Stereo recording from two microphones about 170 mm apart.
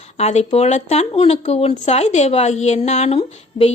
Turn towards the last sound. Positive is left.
turn(degrees=35)  # may be behind; listen again after turning